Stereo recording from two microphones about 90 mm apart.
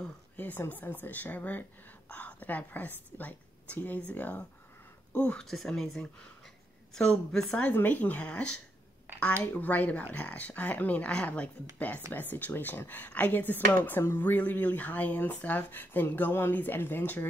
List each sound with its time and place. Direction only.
0.4 s speech: 20° left (ahead or behind)
7.5 s speech: 20° left (ahead or behind)